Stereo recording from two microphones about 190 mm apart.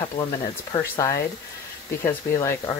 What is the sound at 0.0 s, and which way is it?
Speech, 20° left (ahead or behind).